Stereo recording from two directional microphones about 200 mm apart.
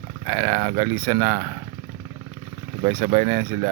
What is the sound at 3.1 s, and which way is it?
Speech, 25° right (ahead or behind).